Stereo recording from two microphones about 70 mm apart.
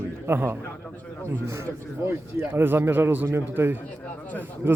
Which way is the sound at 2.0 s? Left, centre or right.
Right.